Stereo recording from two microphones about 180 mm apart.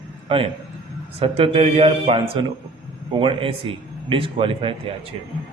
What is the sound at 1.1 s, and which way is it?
A man's voice, 30° right (ahead or behind).